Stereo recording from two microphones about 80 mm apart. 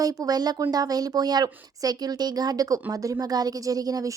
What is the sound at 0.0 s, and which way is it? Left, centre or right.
Speech, right.